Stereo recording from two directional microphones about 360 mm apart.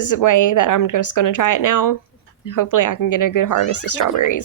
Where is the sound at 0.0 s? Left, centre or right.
Left.